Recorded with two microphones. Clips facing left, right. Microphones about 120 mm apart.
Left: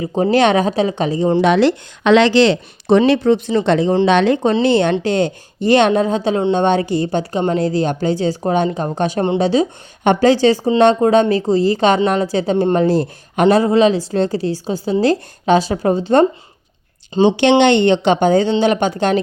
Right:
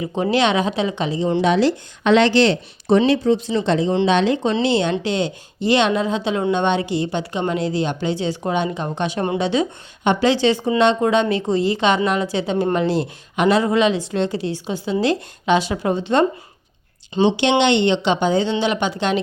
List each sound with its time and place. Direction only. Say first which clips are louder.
0.2 s a woman's voice: left 5 dB; 45° left (ahead or behind)
1.4 s speech: left 3 dB; 65° left (ahead or behind); by 3.0 s 85° left
3.1 s a woman's voice: left 4 dB; 65° left (ahead or behind); by 9.6 s 40° left (ahead or behind)
10.0 s a woman's voice: left 5 dB; 50° left (ahead or behind)
17.2 s a woman's voice: left 5 dB; 50° left (ahead or behind)